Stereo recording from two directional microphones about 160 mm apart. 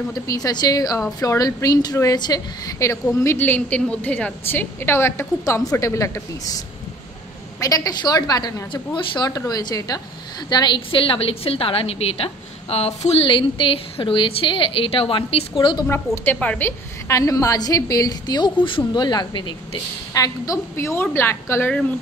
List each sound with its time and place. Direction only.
0.1 s a woman's voice: 25° left (ahead or behind)
7.6 s a woman's voice: 20° left (ahead or behind)
16.3 s a woman's voice: 10° left (ahead or behind)